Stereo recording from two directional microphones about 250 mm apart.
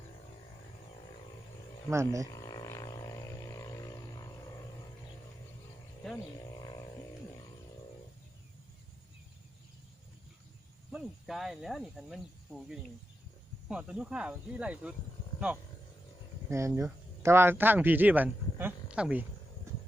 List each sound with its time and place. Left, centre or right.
1.9 s speech: centre
2.3 s a sound: centre
6.6 s a sound: centre
10.9 s speech: centre
13.7 s speech: centre
16.5 s speech: centre